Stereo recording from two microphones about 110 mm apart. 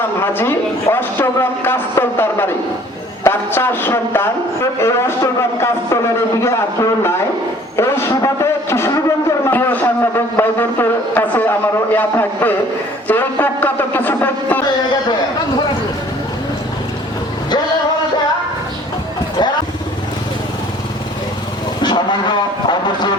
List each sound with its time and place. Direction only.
0.2 s a man's voice: 20° left (ahead or behind)
4.8 s music: 25° left (ahead or behind)
6.4 s a man's voice: 25° left (ahead or behind)
7.8 s a sound: 25° left (ahead or behind)
21.8 s vehicle: 45° left (ahead or behind)